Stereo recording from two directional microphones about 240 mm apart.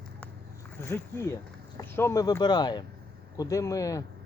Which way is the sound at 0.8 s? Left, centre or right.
Centre.